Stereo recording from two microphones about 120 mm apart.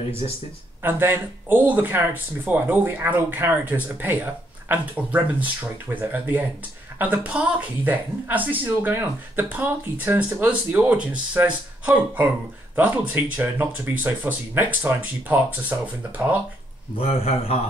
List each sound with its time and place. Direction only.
0.2 s speech: 50° left (ahead or behind)
0.8 s speech: 20° right (ahead or behind)
16.9 s a man's voice: 55° left (ahead or behind)